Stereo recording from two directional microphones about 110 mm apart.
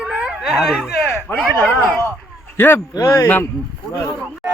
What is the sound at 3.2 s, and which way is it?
Speech, 20° left (ahead or behind).